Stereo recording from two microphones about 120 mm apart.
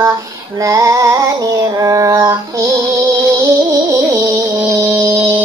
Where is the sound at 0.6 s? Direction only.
25° right (ahead or behind).